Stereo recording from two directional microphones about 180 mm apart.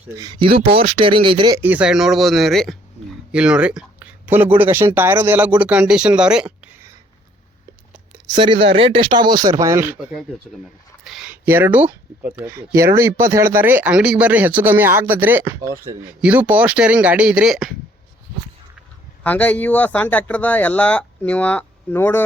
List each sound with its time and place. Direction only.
0.2 s speech: 25° right (ahead or behind)
1.6 s speech: 5° right (ahead or behind)
8.4 s speech: 30° right (ahead or behind); by 17.7 s centre (ahead or behind)
19.2 s speech: 10° left (ahead or behind)